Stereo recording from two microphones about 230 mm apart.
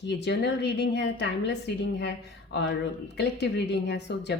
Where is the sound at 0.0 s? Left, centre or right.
Left.